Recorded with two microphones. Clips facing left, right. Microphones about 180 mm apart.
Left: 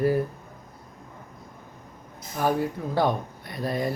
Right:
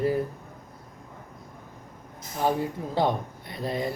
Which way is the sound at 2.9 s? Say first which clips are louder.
Left 1 dB; 25° right (ahead or behind).